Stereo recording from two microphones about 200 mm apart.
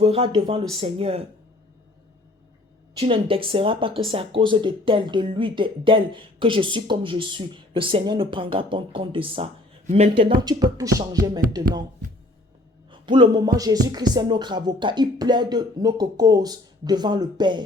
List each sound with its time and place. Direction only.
0.0 s speech: 30° right (ahead or behind)
3.0 s speech: 25° right (ahead or behind)
12.9 s speech: 25° right (ahead or behind)